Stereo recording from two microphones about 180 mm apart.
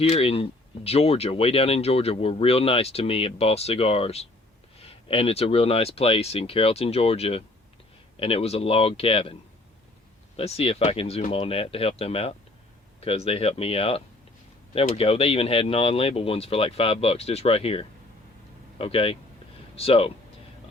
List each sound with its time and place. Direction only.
0.0 s speech: 35° left (ahead or behind)
10.3 s speech: 35° left (ahead or behind)